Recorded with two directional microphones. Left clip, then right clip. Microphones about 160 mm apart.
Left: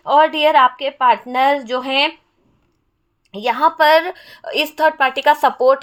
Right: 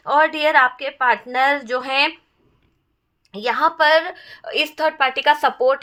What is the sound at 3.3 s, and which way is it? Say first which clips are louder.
A woman's voice: left 3 dB; 20° left (ahead or behind).